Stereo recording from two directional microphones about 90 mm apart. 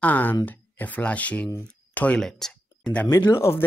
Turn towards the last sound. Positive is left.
turn(degrees=25)  # may be behind; listen again after turning